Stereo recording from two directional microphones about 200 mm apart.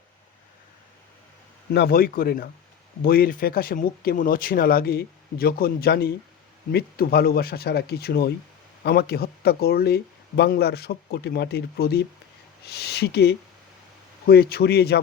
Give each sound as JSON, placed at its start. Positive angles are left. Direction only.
{"t": 1.7, "sound": "speech", "side_deg": 50}